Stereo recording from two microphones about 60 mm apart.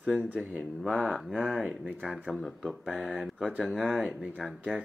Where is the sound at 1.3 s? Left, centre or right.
Centre.